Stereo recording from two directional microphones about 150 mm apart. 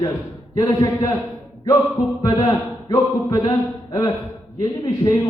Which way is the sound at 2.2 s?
25° left (ahead or behind).